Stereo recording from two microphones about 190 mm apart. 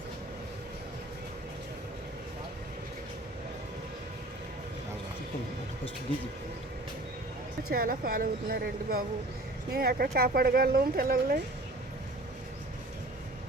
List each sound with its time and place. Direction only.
7.7 s speech: 50° right (ahead or behind)